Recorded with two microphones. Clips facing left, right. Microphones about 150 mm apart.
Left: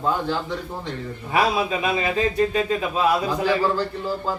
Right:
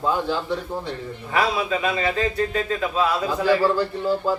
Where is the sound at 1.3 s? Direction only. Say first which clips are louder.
Left 1 dB; 15° left (ahead or behind).